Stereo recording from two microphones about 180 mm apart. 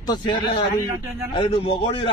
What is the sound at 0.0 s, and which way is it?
A man's voice, 25° left (ahead or behind).